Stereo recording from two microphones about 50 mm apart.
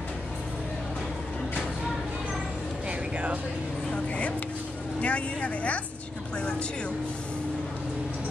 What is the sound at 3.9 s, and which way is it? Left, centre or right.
Speech, left.